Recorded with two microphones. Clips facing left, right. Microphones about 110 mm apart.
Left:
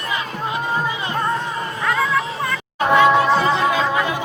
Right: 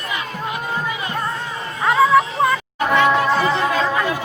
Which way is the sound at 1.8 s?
25° right (ahead or behind).